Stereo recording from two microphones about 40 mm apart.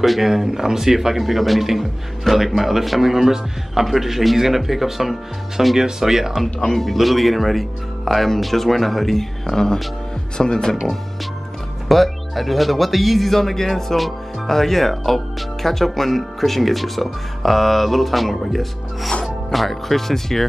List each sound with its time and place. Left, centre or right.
0.0 s speech: centre
6.7 s speech: centre
11.9 s speech: centre